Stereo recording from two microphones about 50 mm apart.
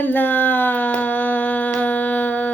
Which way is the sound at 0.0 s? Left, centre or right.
Left.